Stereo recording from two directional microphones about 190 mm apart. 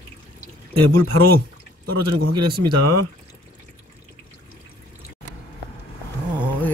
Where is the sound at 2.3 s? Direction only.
55° right (ahead or behind).